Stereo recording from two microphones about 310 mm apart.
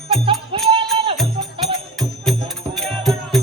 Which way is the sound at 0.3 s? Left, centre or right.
Centre.